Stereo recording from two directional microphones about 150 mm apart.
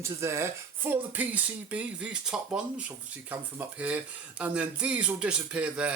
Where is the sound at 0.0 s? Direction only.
20° right (ahead or behind).